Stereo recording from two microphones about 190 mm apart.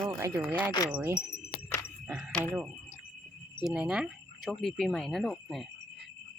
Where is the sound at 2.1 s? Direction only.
5° right (ahead or behind).